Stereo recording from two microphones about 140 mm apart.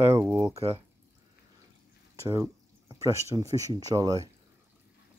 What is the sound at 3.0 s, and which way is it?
Speech, 25° right (ahead or behind).